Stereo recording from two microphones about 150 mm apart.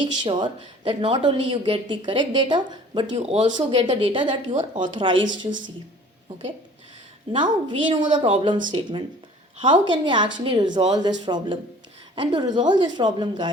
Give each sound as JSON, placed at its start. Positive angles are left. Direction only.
{"t": 0.0, "sound": "speech", "side_deg": -30}
{"t": 7.3, "sound": "a woman's voice", "side_deg": -35}